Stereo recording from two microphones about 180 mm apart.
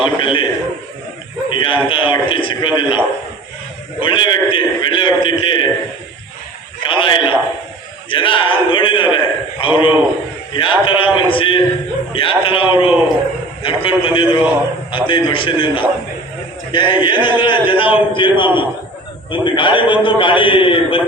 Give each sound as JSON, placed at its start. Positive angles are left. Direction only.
{"t": 0.0, "sound": "a man's voice", "side_deg": 25}
{"t": 1.5, "sound": "a man's voice", "side_deg": 25}
{"t": 4.0, "sound": "a man's voice", "side_deg": 25}
{"t": 6.8, "sound": "a man's voice", "side_deg": 25}